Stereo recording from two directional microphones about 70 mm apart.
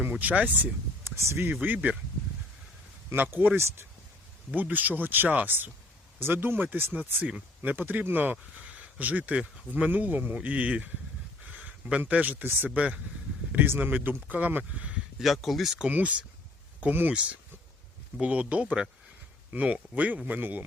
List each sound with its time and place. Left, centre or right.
0.1 s speech: right
1.0 s speech: right
1.6 s speech: right
3.1 s speech: right
15.2 s speech: centre
15.9 s speech: right
18.2 s speech: centre